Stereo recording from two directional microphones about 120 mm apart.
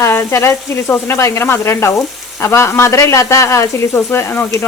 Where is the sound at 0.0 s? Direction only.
20° left (ahead or behind).